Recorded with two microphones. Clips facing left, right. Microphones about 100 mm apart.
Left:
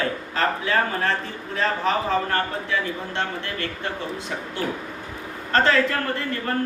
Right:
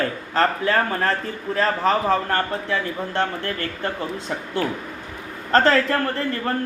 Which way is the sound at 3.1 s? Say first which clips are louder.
Right 5 dB; 40° right (ahead or behind).